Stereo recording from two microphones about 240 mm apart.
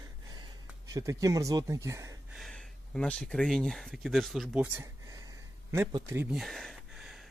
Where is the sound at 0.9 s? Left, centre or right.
Centre.